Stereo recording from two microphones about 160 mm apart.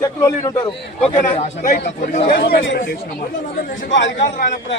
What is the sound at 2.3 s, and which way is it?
Speech, 80° left.